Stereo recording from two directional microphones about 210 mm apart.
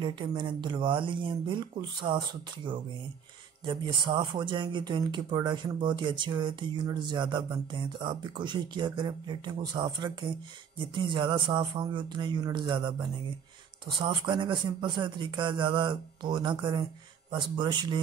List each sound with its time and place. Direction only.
0.0 s speech: 20° right (ahead or behind)